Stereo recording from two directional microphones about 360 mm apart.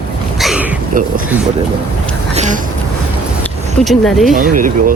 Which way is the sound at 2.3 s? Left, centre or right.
Centre.